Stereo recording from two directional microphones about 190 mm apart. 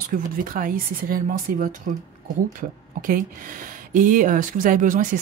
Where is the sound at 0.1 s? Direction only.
45° right (ahead or behind).